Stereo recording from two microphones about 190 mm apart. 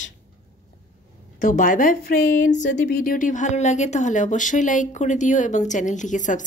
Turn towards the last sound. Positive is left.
turn(degrees=40)  # may be behind; listen again after turning